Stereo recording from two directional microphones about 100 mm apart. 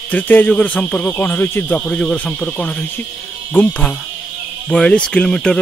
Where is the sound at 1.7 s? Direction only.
10° left (ahead or behind).